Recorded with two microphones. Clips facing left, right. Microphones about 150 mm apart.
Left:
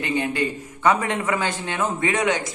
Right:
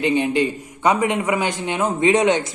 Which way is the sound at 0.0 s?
20° right (ahead or behind).